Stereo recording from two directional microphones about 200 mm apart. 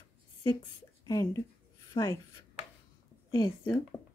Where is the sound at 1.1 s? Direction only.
20° left (ahead or behind).